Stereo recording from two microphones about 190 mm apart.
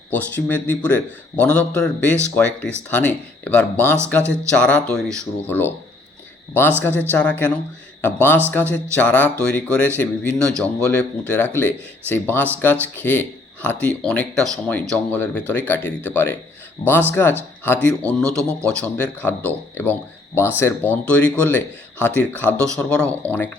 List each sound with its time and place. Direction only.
0.1 s a man's voice: 10° left (ahead or behind)